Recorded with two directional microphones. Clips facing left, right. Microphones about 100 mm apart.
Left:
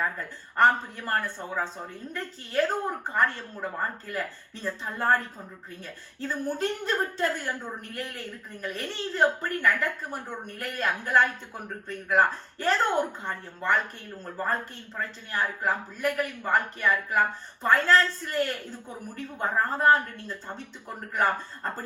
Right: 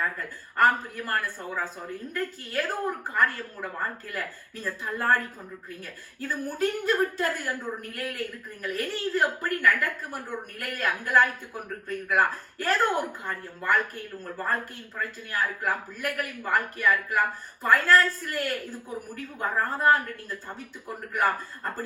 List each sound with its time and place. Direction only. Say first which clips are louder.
0.5 s a woman's voice: left 1 dB; 25° left (ahead or behind)
14.9 s a woman's voice: even; 25° left (ahead or behind)